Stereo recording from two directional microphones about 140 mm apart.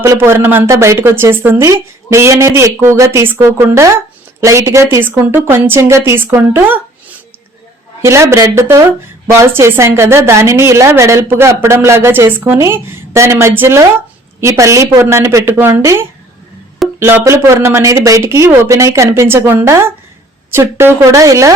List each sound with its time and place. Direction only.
0.0 s a woman's voice: 20° right (ahead or behind)
8.0 s a woman's voice: 20° right (ahead or behind)